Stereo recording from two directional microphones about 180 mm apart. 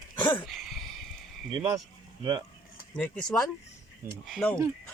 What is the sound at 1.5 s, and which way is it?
Speech, 25° right (ahead or behind).